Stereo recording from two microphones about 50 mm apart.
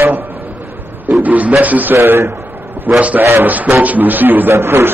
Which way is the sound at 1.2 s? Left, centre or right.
Right.